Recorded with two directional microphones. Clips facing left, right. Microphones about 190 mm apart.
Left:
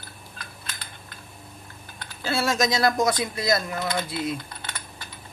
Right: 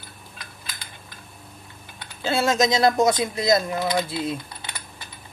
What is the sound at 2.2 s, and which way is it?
Speech, 25° right (ahead or behind).